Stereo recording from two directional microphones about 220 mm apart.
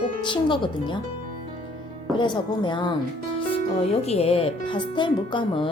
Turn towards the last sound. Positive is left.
turn(degrees=20)  # may be behind; listen again after turning